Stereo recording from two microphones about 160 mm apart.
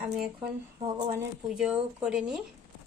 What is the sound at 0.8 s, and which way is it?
Speech, 30° right (ahead or behind).